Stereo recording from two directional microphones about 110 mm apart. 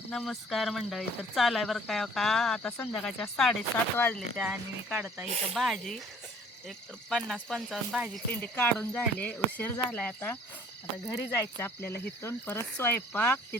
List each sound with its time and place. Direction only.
0.1 s speech: centre (ahead or behind)
3.9 s speech: 20° left (ahead or behind)
4.4 s speech: 15° right (ahead or behind)
5.3 s speech: 70° right (ahead or behind)
5.5 s speech: centre (ahead or behind)
8.3 s speech: 15° left (ahead or behind)